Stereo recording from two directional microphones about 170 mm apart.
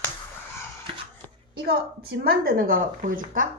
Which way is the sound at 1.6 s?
70° right (ahead or behind).